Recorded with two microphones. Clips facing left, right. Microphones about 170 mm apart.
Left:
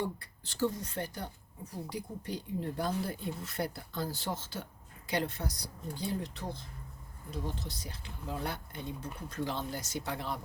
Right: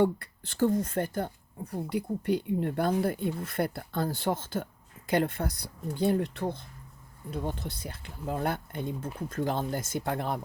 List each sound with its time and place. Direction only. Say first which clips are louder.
0.0 s speech: right 11 dB; 60° right (ahead or behind)